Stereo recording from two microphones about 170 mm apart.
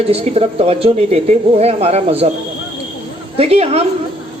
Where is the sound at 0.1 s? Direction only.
35° right (ahead or behind).